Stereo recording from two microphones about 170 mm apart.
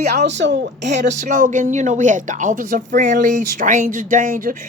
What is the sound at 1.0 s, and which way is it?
Speech, 45° right (ahead or behind).